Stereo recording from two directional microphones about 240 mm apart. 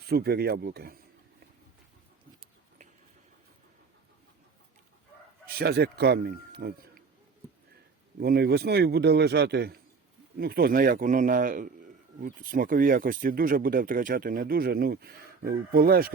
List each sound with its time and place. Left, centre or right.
0.0 s speech: right
5.5 s speech: right
8.2 s a man's voice: right